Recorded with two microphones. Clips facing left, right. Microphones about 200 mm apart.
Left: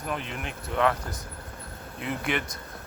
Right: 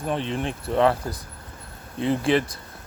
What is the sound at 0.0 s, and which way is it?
Speech, 30° right (ahead or behind).